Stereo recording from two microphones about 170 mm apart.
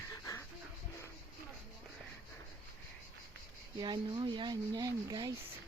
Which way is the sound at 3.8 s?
25° right (ahead or behind).